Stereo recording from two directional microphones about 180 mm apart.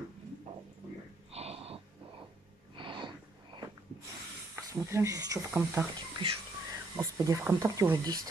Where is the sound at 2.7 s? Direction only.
25° right (ahead or behind).